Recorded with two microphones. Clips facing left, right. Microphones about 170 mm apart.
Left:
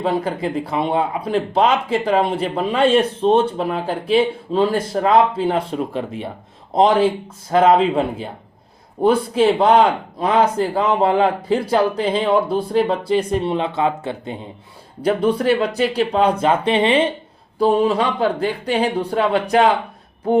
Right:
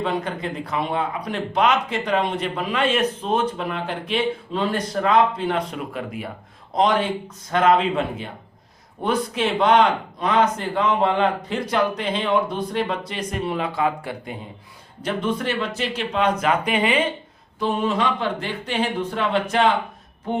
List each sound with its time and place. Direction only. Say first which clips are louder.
0.1 s speech: left 5 dB; 30° left (ahead or behind)
15.0 s speech: left 7 dB; 35° left (ahead or behind)